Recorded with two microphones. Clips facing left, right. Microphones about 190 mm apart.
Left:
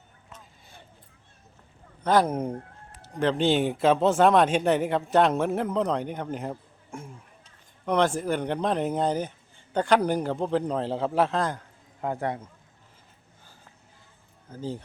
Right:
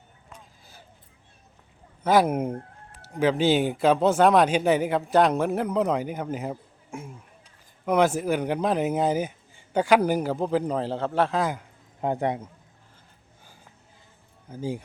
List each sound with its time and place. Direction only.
2.0 s speech: 10° right (ahead or behind)
11.9 s a man's voice: 20° right (ahead or behind)
14.5 s speech: 10° right (ahead or behind)